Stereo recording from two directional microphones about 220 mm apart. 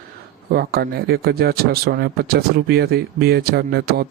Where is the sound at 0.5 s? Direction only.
45° right (ahead or behind).